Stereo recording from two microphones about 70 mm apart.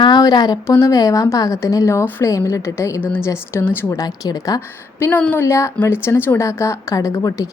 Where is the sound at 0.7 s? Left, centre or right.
Left.